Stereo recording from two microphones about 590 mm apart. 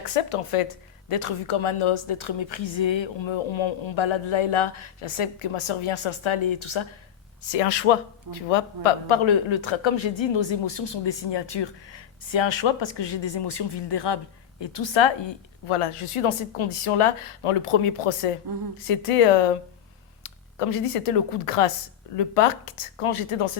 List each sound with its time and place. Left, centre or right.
0.1 s a woman's voice: left
7.5 s a woman's voice: left